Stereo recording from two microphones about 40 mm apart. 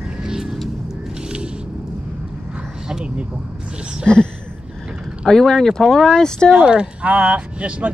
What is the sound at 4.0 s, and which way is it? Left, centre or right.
Speech, left.